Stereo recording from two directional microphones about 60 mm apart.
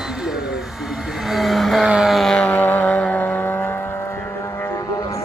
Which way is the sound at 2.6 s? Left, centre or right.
Left.